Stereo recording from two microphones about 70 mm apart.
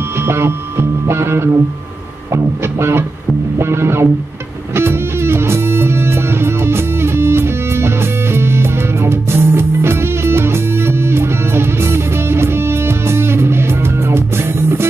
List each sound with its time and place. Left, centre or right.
0.2 s music: right
2.3 s speech: right
4.7 s music: right